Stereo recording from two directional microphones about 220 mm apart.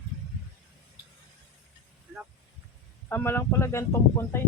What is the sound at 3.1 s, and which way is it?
Speech, 10° left (ahead or behind).